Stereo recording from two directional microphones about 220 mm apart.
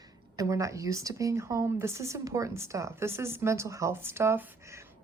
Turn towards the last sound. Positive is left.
turn(degrees=-10)  # may be behind; listen again after turning